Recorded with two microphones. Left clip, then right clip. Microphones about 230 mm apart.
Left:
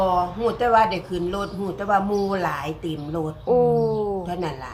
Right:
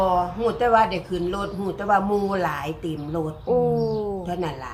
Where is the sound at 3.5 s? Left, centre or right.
Centre.